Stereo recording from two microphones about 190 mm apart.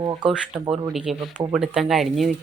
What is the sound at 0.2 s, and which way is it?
Speech, 5° right (ahead or behind).